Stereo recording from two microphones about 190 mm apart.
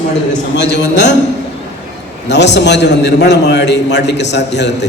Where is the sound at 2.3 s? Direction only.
65° left (ahead or behind).